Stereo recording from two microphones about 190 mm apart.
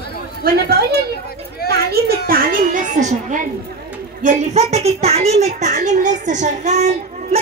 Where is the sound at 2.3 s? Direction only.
50° right (ahead or behind).